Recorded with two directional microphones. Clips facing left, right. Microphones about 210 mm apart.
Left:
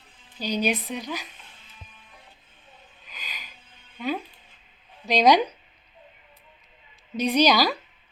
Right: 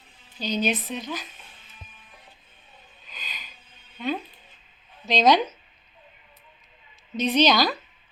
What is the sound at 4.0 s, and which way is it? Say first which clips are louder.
A woman's voice: even; 5° left (ahead or behind).